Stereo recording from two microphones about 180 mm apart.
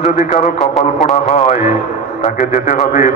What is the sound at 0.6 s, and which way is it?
Speech, centre (ahead or behind).